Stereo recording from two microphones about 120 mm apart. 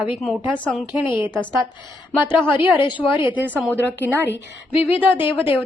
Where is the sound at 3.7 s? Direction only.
15° right (ahead or behind).